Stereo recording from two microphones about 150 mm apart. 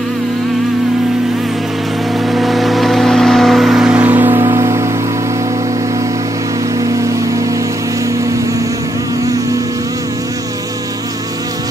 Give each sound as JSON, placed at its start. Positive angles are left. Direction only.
{"t": 2.3, "sound": "music", "side_deg": 0}